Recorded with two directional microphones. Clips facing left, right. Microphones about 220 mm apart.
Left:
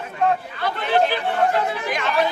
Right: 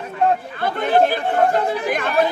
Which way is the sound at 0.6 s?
50° right (ahead or behind).